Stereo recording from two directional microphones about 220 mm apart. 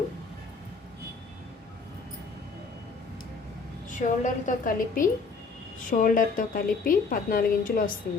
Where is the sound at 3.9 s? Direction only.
35° left (ahead or behind).